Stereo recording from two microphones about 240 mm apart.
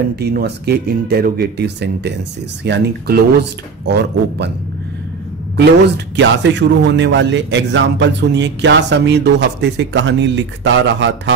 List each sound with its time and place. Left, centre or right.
0.1 s a man's voice: right
5.9 s a man's voice: right